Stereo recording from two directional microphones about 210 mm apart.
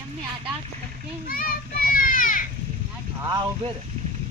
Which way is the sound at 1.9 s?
40° left (ahead or behind).